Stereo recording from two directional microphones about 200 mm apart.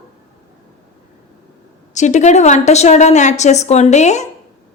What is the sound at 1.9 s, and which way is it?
A woman's voice, 35° left (ahead or behind).